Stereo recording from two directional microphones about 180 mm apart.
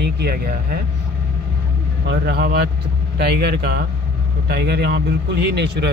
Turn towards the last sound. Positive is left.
turn(degrees=-65)  # may be behind; listen again after turning